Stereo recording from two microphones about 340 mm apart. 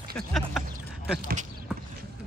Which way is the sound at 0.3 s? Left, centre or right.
Centre.